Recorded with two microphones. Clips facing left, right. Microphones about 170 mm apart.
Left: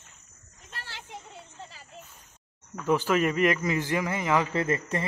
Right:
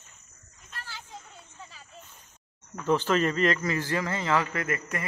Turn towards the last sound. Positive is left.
turn(degrees=25)  # may be behind; listen again after turning